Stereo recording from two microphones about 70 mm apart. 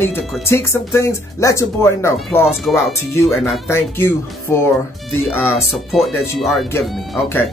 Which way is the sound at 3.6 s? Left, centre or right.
Left.